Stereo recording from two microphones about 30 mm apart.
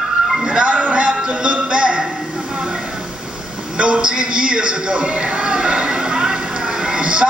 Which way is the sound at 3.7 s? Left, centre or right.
Right.